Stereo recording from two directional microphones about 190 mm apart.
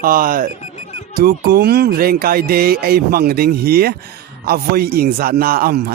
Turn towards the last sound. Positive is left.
turn(degrees=-50)  # may be behind; listen again after turning